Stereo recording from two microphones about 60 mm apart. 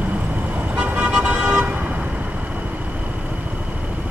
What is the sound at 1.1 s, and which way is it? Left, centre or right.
Vehicle, centre.